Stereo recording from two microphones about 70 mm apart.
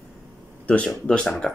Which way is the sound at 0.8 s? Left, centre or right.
Centre.